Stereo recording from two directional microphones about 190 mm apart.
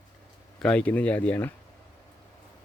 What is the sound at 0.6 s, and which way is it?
Speech, 5° left (ahead or behind).